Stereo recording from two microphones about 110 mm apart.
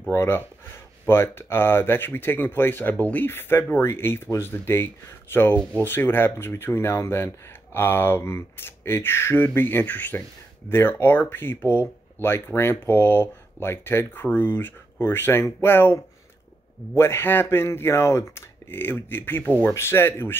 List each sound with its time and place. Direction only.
0.1 s speech: 20° left (ahead or behind)